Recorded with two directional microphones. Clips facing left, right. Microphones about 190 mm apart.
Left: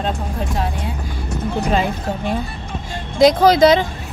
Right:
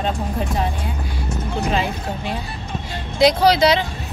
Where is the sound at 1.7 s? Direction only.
50° left (ahead or behind).